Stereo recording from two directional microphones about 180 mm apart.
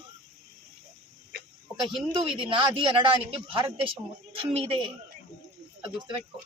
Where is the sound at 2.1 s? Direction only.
30° right (ahead or behind).